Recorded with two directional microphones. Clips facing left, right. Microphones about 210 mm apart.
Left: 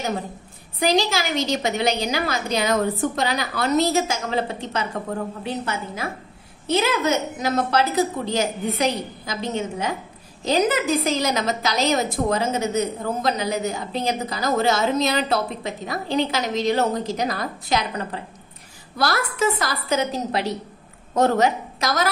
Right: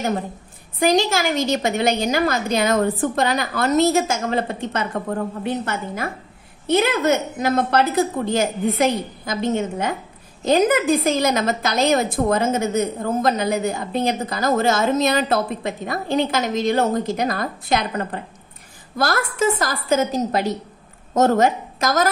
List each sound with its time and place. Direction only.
0.7 s a woman's voice: 50° right (ahead or behind)